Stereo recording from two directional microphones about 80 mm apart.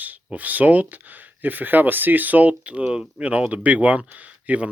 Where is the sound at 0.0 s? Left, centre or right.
Centre.